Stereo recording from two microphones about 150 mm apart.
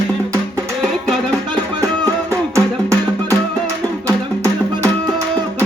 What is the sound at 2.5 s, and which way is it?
Music, 20° right (ahead or behind).